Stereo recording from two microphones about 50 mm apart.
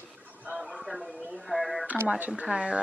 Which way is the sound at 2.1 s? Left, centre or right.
Right.